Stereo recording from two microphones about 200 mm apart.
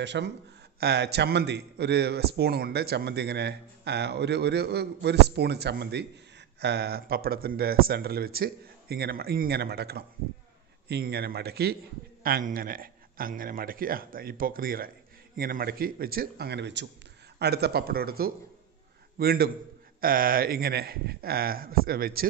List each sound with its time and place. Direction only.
0.0 s a man's voice: 60° right (ahead or behind)